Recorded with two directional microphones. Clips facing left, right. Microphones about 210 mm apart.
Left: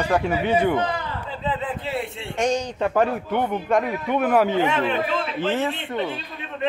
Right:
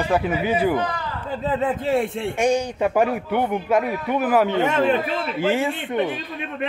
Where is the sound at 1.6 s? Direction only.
45° right (ahead or behind).